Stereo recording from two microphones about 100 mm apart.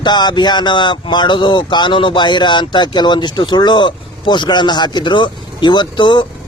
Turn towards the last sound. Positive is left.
turn(degrees=50)  # may be behind; listen again after turning